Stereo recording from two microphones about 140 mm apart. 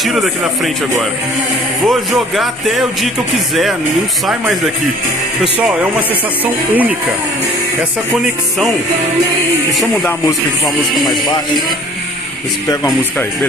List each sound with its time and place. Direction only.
0.0 s speech: centre (ahead or behind)
1.8 s speech: centre (ahead or behind)
11.1 s speech: 30° left (ahead or behind)